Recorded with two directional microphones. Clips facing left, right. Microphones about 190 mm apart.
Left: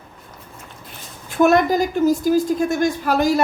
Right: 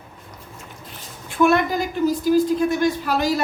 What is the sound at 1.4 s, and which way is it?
A woman's voice, 40° left (ahead or behind).